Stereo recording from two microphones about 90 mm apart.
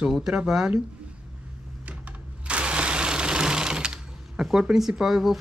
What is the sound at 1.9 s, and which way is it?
Engine, 15° right (ahead or behind).